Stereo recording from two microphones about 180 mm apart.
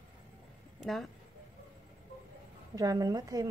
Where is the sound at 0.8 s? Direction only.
Centre (ahead or behind).